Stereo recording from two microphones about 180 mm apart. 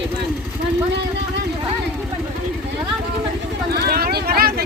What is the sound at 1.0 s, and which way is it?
Vehicle, 75° right (ahead or behind).